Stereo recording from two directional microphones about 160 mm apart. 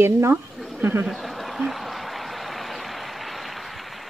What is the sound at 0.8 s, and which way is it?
Speech, 10° right (ahead or behind).